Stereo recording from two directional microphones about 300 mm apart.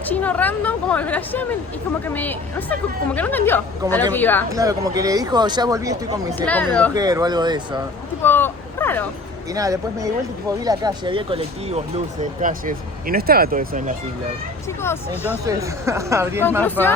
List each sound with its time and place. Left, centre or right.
0.0 s a woman's voice: centre
4.5 s speech: centre
6.4 s a woman's voice: centre
6.9 s speech: centre
8.2 s a sound: centre
9.5 s speech: centre; by 13.9 s right
14.8 s a woman's voice: centre
15.3 s speech: centre
16.6 s a woman's voice: centre